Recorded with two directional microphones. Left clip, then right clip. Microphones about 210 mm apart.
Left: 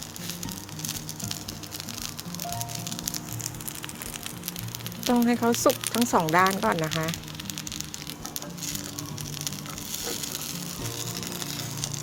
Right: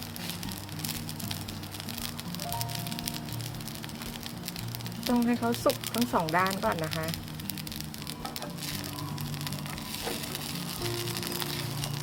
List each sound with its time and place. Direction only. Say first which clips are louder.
5.0 s speech: left 5 dB; 40° left (ahead or behind)